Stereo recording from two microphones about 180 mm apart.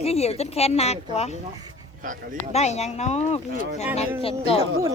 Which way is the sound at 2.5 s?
35° left (ahead or behind).